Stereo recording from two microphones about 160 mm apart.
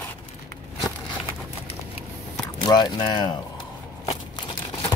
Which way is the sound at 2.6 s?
25° left (ahead or behind).